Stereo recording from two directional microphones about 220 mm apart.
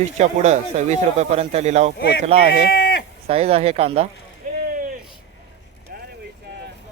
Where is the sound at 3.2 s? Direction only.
25° right (ahead or behind).